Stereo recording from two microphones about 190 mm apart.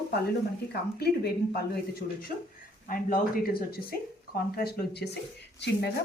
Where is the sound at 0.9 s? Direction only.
55° left (ahead or behind).